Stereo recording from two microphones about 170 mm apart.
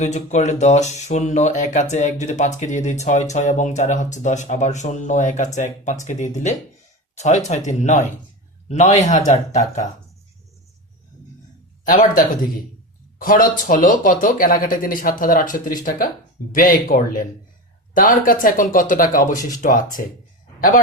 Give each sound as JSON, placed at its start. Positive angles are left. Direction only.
{"t": 0.0, "sound": "speech", "side_deg": 45}
{"t": 11.9, "sound": "a man's voice", "side_deg": 55}